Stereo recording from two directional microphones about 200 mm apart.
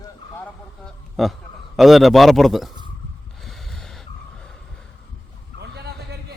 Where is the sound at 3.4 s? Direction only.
Centre (ahead or behind).